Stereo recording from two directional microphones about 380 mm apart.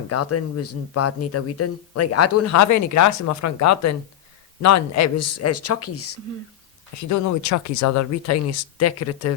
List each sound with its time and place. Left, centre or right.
0.1 s speech: left
7.1 s speech: left